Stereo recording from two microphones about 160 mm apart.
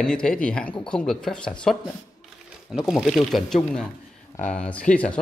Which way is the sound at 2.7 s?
Centre (ahead or behind).